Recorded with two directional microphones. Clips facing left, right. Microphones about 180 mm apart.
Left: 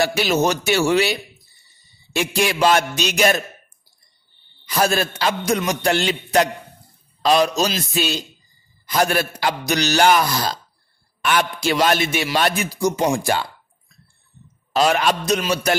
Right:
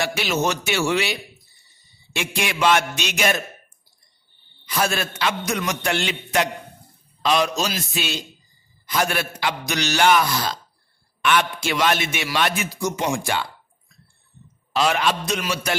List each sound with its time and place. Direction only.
0.0 s a man's voice: 40° left (ahead or behind)
2.1 s a man's voice: 40° left (ahead or behind)
4.6 s a man's voice: 40° left (ahead or behind)
14.7 s a man's voice: 40° left (ahead or behind)